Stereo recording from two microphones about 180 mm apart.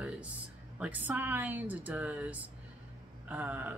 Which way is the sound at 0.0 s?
5° right (ahead or behind).